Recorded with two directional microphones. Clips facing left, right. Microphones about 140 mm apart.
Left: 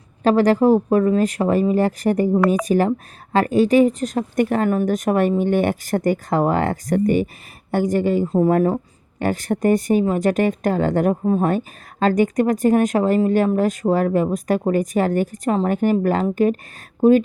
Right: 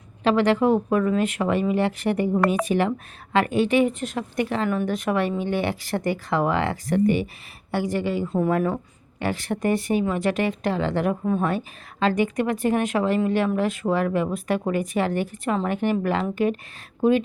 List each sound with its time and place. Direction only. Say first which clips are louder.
0.2 s a woman's voice: left 4 dB; 40° left (ahead or behind)